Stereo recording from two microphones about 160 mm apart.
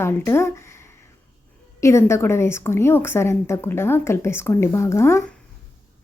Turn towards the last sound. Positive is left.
turn(degrees=15)  # may be behind; listen again after turning